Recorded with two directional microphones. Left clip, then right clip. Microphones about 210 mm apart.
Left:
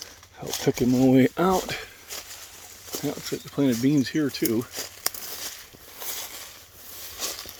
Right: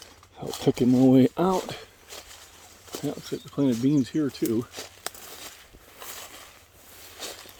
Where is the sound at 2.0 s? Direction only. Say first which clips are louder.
Left 5 dB; 45° left (ahead or behind).